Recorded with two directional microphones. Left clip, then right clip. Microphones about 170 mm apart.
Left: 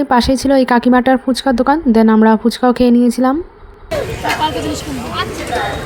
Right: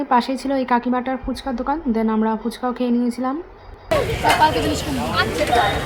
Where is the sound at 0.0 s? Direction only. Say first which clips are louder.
Left 6 dB; 35° left (ahead or behind).